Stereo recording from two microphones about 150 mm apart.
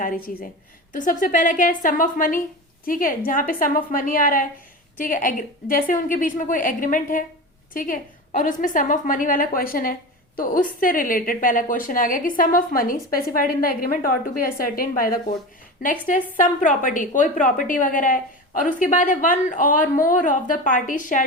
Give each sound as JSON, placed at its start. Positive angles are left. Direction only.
{"t": 0.9, "sound": "a woman's voice", "side_deg": 60}